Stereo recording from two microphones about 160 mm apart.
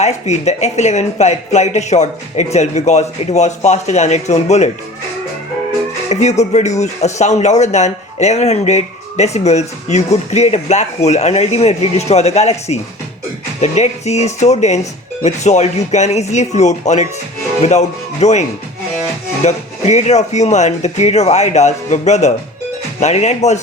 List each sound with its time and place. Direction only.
0.0 s speech: 45° left (ahead or behind)
6.1 s speech: 45° left (ahead or behind)
19.5 s speech: 45° left (ahead or behind)